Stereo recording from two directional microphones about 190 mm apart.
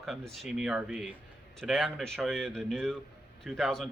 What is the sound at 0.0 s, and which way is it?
Speech, centre (ahead or behind).